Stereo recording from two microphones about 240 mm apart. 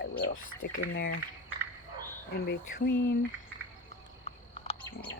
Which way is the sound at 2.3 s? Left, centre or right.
Left.